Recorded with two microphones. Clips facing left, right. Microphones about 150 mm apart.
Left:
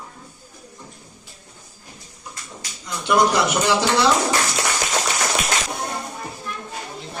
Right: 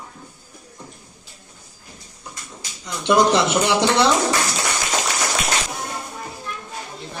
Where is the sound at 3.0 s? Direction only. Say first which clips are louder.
Right 2 dB; 20° right (ahead or behind).